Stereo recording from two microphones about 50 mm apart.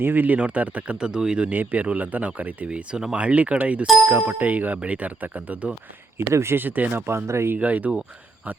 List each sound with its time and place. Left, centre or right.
0.0 s speech: right
0.3 s speech: right
1.5 s speech: right
2.6 s speech: centre
6.3 s speech: right
6.6 s speech: right
6.9 s speech: right
7.5 s speech: right